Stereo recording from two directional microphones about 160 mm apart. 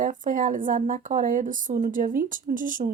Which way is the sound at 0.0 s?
55° right (ahead or behind).